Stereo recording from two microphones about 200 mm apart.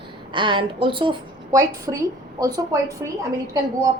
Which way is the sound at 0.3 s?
25° right (ahead or behind).